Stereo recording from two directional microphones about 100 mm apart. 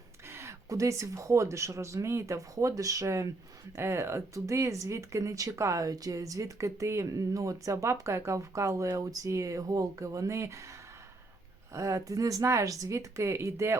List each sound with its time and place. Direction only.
0.3 s speech: 25° right (ahead or behind)
11.7 s speech: 35° right (ahead or behind)